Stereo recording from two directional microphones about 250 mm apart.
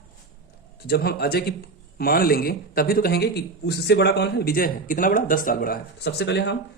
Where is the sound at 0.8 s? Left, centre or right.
Left.